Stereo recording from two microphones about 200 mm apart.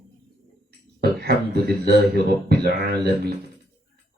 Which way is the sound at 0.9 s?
55° right (ahead or behind).